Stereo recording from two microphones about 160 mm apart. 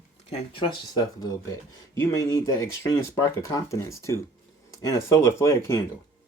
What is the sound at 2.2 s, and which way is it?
Speech, 20° left (ahead or behind).